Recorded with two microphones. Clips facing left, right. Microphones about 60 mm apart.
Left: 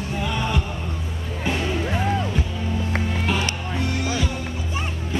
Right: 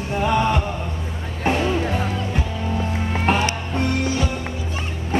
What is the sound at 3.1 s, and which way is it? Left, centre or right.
Music, right.